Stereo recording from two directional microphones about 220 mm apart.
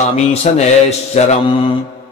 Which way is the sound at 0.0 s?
30° left (ahead or behind).